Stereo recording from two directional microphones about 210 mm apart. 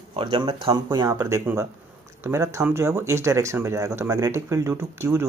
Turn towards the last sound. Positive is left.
turn(degrees=-15)  # may be behind; listen again after turning